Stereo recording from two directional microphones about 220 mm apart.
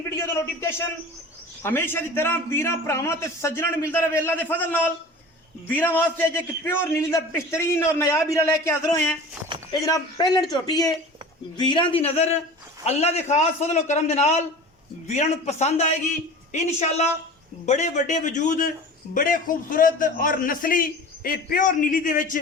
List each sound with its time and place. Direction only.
1.6 s a man's voice: 10° left (ahead or behind); by 22.4 s 35° left (ahead or behind)